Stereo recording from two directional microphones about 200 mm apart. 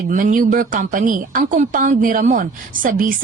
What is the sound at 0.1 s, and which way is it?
A woman's voice, 40° right (ahead or behind).